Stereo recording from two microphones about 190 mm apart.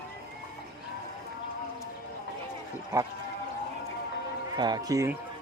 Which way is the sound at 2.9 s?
20° right (ahead or behind).